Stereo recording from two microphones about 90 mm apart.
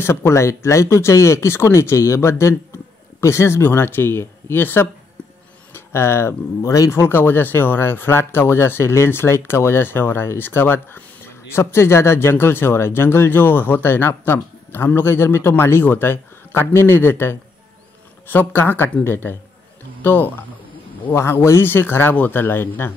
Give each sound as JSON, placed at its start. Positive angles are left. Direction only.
{"t": 0.0, "sound": "speech", "side_deg": 30}
{"t": 6.7, "sound": "speech", "side_deg": 40}
{"t": 7.0, "sound": "speech", "side_deg": 25}